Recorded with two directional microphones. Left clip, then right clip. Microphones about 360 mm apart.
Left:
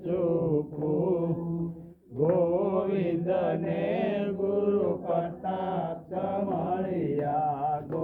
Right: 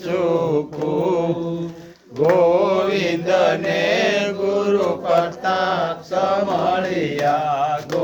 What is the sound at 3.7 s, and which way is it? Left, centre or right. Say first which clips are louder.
Mantra: right 11 dB; right.